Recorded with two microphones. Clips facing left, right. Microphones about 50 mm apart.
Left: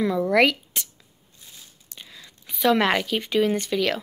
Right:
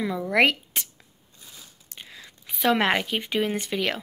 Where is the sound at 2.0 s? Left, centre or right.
Right.